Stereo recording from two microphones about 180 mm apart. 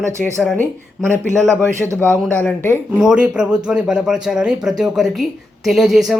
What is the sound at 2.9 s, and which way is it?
Speech, 5° right (ahead or behind).